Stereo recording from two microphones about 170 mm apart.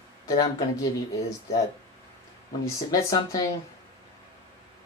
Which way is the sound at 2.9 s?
20° left (ahead or behind).